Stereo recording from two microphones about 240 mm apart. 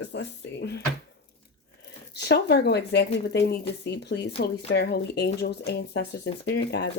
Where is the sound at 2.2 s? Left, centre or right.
Left.